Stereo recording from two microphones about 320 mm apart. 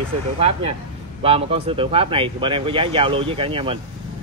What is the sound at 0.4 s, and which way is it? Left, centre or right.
A man's voice, centre.